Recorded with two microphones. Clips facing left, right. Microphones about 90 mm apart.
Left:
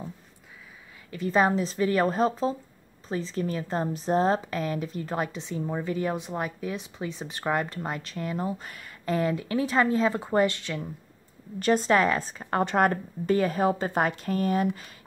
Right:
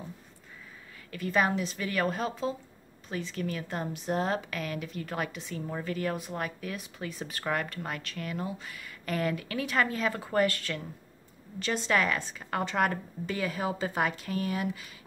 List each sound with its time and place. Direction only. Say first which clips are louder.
1.1 s a woman's voice: left 4 dB; 30° left (ahead or behind)
8.5 s a woman's voice: left 1 dB; 40° left (ahead or behind)
9.0 s a woman's voice: left 4 dB; 25° left (ahead or behind)
11.6 s a woman's voice: left 6 dB; 40° left (ahead or behind)